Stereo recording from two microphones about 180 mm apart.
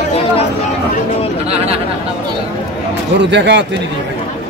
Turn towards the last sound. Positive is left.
turn(degrees=-75)  # may be behind; listen again after turning